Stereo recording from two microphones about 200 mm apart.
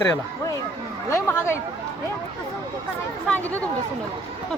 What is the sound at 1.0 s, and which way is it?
Chatter, 15° left (ahead or behind).